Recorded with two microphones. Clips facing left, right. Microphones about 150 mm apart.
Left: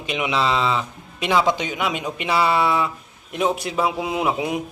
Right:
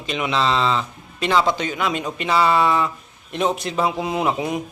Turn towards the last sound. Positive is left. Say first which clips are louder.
# right 1 dB
turn(degrees=5)  # may be behind; listen again after turning